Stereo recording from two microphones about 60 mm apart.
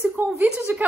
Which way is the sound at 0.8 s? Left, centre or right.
Right.